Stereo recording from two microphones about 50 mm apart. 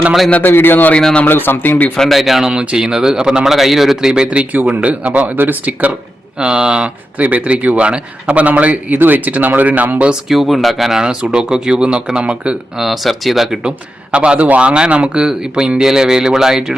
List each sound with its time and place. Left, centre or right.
0.4 s speech: left
0.9 s speech: centre
1.2 s speech: left
2.0 s speech: centre
2.5 s a man's voice: centre
4.3 s speech: right
6.4 s speech: centre
10.2 s a man's voice: centre; by 12.5 s right
12.7 s speech: centre
13.7 s a man's voice: centre